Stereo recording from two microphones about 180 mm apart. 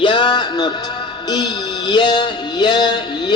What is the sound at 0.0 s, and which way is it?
Music, 25° left (ahead or behind).